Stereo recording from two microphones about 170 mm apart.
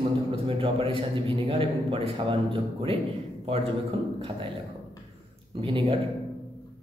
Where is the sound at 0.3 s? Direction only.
30° right (ahead or behind).